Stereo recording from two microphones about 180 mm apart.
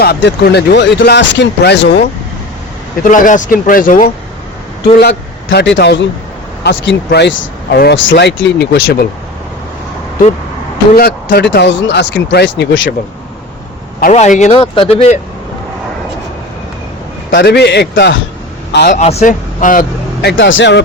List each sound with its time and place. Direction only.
0.0 s speech: 65° left (ahead or behind)
3.0 s a man's voice: 45° left (ahead or behind); by 6.1 s 80° left
6.7 s speech: 70° left (ahead or behind)
10.9 s speech: 60° left (ahead or behind); by 12.9 s 80° left
14.0 s speech: 40° left (ahead or behind)
17.3 s speech: 65° left (ahead or behind)
18.9 s speech: 45° left (ahead or behind)
20.2 s speech: 85° left